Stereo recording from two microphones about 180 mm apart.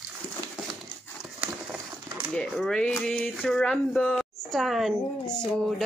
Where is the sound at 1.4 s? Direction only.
5° right (ahead or behind).